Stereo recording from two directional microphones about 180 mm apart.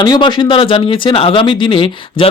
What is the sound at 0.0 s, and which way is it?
Speech, 25° left (ahead or behind).